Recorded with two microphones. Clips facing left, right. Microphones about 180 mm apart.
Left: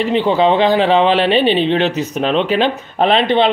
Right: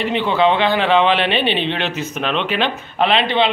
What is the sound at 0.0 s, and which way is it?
Speech, 40° left (ahead or behind).